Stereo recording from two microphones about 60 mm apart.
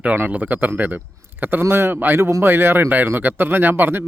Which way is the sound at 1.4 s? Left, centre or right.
Right.